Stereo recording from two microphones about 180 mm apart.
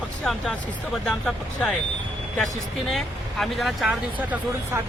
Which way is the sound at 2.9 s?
Centre (ahead or behind).